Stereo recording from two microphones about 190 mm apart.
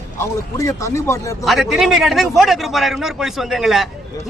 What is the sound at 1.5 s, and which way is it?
A man's voice, centre (ahead or behind).